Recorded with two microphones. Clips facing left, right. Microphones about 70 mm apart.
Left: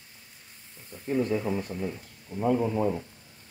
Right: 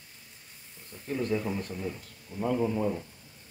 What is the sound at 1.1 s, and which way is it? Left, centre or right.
Speech, centre.